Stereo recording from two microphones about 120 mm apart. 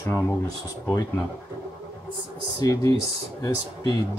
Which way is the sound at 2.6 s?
30° left (ahead or behind).